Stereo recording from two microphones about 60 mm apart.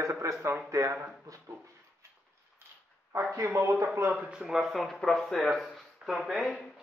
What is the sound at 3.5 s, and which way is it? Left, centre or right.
Speech, right.